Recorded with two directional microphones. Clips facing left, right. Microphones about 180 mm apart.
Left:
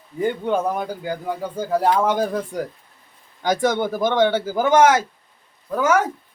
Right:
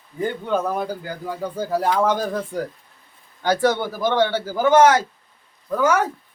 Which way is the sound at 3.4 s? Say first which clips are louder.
Even; 15° left (ahead or behind).